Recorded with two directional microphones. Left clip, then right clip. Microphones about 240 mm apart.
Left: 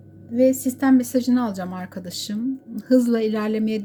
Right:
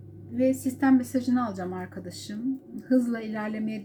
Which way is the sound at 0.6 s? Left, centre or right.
Left.